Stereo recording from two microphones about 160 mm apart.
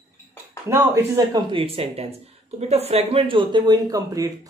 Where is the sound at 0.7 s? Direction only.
20° right (ahead or behind).